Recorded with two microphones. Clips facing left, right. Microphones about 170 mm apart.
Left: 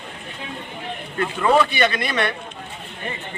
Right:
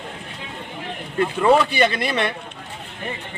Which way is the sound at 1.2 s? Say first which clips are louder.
Right 2 dB; 25° right (ahead or behind).